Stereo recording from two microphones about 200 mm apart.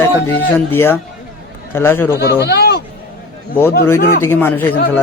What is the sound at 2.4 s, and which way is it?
Speech, 55° left (ahead or behind).